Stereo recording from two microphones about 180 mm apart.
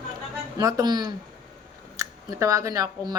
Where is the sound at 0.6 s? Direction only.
20° right (ahead or behind).